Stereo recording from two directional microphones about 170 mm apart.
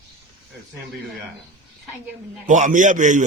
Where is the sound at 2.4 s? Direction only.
45° right (ahead or behind).